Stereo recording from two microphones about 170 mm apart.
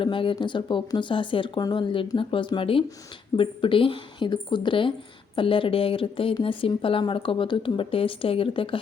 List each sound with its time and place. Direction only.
0.0 s speech: 30° left (ahead or behind)